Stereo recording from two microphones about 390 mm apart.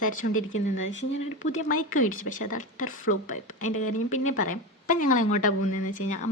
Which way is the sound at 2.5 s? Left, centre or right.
Centre.